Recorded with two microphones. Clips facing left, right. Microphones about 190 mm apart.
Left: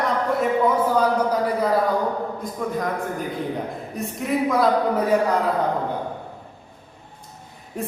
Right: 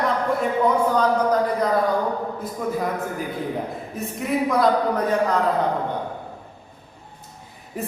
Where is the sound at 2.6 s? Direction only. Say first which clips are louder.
Right 1 dB; 5° right (ahead or behind).